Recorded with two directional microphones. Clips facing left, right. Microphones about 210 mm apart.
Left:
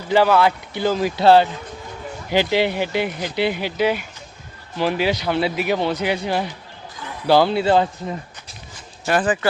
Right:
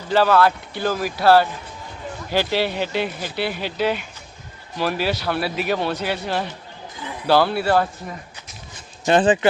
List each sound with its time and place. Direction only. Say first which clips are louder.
0.1 s speech: left 1 dB; 15° left (ahead or behind)
9.0 s speech: right 3 dB; 25° right (ahead or behind)